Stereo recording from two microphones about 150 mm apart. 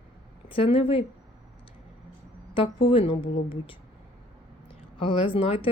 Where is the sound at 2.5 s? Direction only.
35° left (ahead or behind).